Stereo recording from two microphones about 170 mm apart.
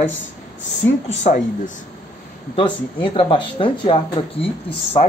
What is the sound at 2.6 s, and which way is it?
A man's voice, 30° left (ahead or behind).